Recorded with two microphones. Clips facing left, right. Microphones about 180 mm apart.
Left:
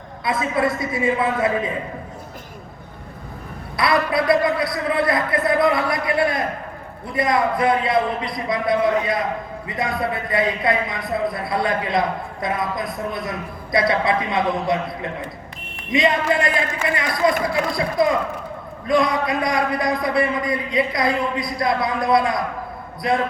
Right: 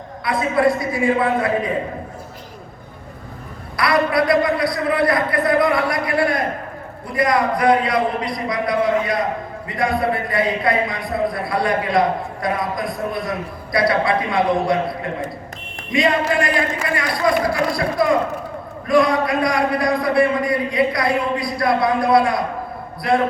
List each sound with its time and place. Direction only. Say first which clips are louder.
0.5 s a man's voice: right 7 dB; 25° left (ahead or behind)
3.8 s a man's voice: right 2 dB; 25° left (ahead or behind)
15.9 s a man's voice: right 1 dB; 20° left (ahead or behind)